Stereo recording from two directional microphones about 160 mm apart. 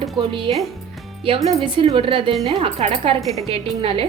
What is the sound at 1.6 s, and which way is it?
A woman's voice, 35° right (ahead or behind).